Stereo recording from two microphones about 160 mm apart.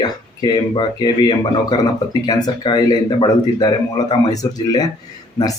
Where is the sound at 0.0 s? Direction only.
30° left (ahead or behind).